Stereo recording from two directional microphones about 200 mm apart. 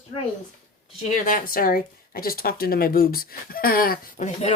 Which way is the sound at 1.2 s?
45° left (ahead or behind).